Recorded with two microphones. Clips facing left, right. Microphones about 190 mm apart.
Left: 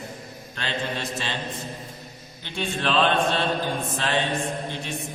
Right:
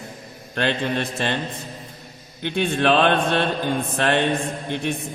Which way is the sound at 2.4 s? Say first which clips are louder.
Right 7 dB; 60° right (ahead or behind).